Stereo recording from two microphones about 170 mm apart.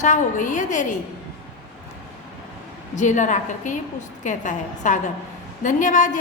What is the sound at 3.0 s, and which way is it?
A woman's voice, 45° left (ahead or behind).